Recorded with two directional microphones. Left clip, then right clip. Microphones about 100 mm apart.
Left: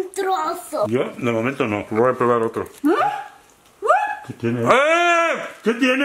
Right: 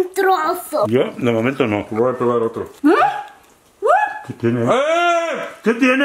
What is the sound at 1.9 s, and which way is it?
Mantra, 50° left (ahead or behind).